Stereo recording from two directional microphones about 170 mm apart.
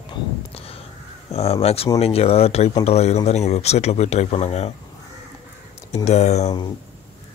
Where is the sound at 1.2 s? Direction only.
35° left (ahead or behind).